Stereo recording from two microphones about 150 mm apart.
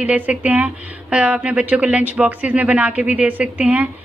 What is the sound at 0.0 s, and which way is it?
A woman's voice, 10° right (ahead or behind).